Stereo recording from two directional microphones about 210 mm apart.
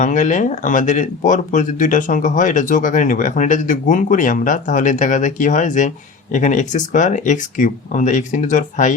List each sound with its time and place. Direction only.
0.0 s speech: 35° left (ahead or behind)